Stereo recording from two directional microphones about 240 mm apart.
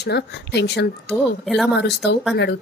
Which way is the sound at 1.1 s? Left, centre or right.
Centre.